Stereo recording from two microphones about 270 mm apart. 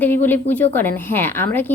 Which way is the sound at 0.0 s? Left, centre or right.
Centre.